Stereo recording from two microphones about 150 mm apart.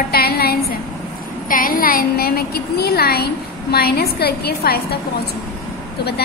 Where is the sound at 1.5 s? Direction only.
70° left (ahead or behind); by 4.8 s 90° left.